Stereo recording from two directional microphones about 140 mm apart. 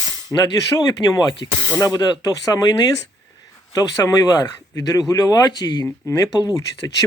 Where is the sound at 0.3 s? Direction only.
20° left (ahead or behind).